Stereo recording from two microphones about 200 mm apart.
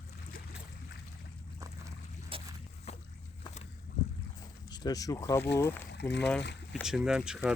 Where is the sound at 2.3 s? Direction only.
25° right (ahead or behind).